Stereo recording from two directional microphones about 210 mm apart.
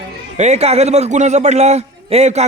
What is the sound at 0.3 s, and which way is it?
A man's voice, 30° right (ahead or behind).